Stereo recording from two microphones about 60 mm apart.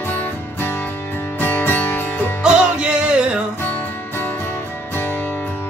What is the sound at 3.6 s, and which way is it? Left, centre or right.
Music, left.